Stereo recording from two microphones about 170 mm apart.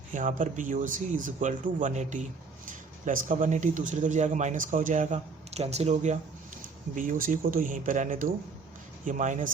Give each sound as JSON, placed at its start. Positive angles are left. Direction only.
{"t": 0.1, "sound": "speech", "side_deg": -50}